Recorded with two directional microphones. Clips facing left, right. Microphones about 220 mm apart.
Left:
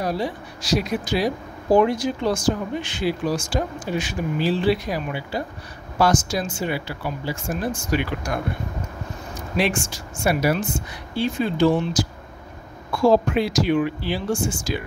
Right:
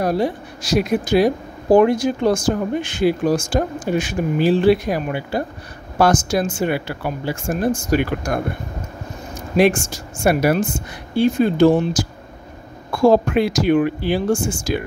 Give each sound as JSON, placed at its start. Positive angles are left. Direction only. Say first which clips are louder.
{"t": 0.0, "sound": "speech", "louder": "right 6 dB", "side_deg": -50}
{"t": 9.6, "sound": "speech", "louder": "right 8 dB", "side_deg": -45}